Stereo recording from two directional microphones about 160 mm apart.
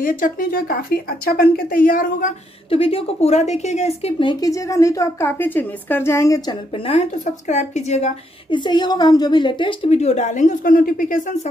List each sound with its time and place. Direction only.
0.0 s speech: 60° left (ahead or behind)
2.7 s a woman's voice: 35° left (ahead or behind); by 6.5 s 20° left (ahead or behind)
6.9 s speech: 40° left (ahead or behind)
8.5 s a woman's voice: 30° left (ahead or behind); by 11.3 s 55° left (ahead or behind)